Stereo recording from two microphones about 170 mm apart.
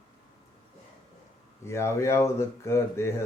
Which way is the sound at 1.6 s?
15° left (ahead or behind).